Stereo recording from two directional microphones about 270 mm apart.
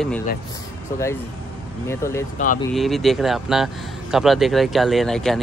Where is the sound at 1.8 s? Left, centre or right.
Centre.